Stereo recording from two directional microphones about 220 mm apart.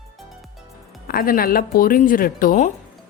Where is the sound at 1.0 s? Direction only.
40° left (ahead or behind).